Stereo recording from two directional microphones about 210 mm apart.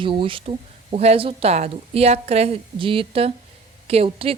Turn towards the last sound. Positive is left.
turn(degrees=-25)  # may be behind; listen again after turning